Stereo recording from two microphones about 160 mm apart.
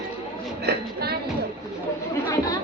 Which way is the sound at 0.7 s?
80° right.